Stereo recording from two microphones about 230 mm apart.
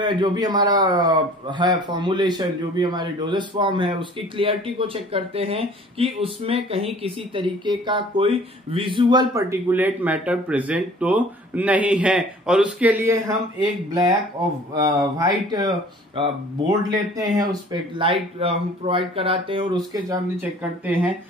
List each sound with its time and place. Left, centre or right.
0.0 s a man's voice: centre